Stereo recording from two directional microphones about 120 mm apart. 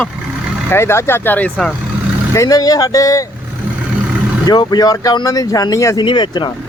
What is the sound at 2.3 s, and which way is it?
Speech, 30° left (ahead or behind).